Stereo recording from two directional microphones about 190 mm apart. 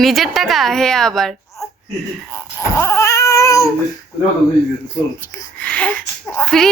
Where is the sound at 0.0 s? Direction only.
Centre (ahead or behind).